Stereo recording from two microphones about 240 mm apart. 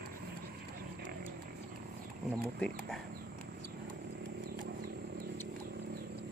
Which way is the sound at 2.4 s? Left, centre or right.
Centre.